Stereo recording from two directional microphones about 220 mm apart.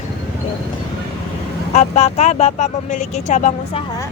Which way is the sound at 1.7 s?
30° left (ahead or behind).